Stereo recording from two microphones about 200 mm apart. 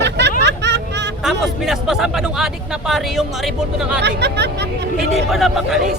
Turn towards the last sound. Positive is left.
turn(degrees=0)  # may be behind; listen again after turning